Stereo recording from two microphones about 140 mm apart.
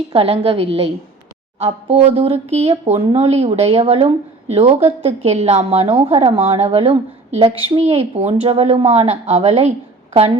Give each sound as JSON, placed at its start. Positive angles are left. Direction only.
{"t": 0.1, "sound": "speech", "side_deg": -45}